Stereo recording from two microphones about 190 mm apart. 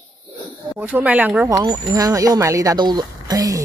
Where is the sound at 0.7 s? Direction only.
10° right (ahead or behind).